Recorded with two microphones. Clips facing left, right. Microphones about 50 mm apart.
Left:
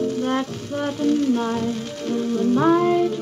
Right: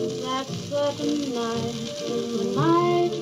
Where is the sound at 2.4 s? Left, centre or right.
Left.